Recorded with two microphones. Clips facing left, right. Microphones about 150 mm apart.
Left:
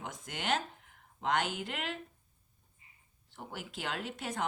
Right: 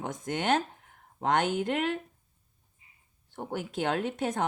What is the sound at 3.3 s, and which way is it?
Speech, 50° right (ahead or behind).